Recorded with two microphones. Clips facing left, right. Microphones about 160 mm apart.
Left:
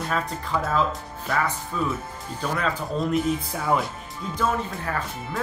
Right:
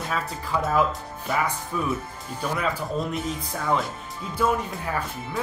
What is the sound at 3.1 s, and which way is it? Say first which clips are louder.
Speech: left 6 dB; 5° left (ahead or behind).